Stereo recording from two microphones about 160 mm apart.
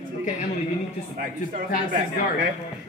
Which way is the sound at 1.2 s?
60° right (ahead or behind).